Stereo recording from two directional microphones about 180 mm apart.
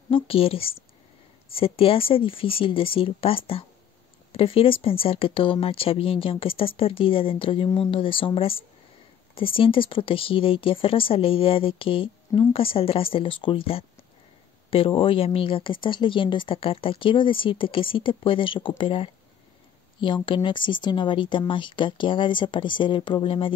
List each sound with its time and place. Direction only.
0.1 s speech: 30° left (ahead or behind)
20.2 s speech: 25° left (ahead or behind)